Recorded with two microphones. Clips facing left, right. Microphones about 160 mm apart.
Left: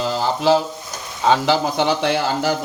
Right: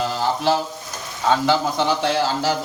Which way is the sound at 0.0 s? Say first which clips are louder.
Left 2 dB; 90° left.